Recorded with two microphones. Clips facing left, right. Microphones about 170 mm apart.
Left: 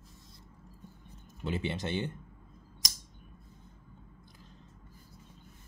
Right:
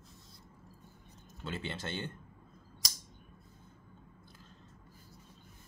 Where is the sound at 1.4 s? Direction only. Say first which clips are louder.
Left 6 dB; 15° left (ahead or behind).